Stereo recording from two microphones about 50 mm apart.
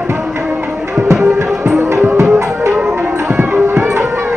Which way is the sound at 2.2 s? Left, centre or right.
Right.